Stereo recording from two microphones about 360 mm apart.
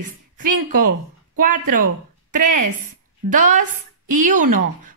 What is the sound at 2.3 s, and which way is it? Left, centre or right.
A woman's voice, right.